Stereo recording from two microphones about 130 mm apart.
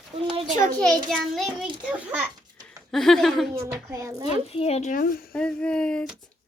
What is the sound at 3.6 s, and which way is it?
Speech, 20° right (ahead or behind).